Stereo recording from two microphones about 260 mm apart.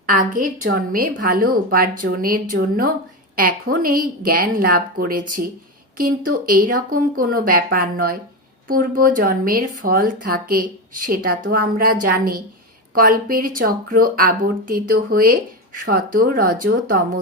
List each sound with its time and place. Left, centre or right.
0.0 s speech: right